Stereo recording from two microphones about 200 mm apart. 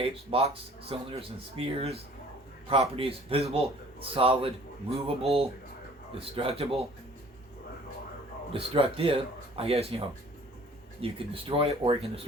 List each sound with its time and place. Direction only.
0.0 s speech: 30° right (ahead or behind)
8.5 s speech: 30° right (ahead or behind)